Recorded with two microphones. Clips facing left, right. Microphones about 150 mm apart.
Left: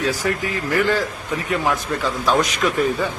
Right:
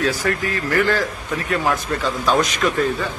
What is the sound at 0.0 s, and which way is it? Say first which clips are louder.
A man's voice: right 1 dB; 15° left (ahead or behind).